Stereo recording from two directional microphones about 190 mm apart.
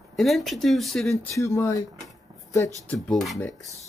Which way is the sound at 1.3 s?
15° left (ahead or behind).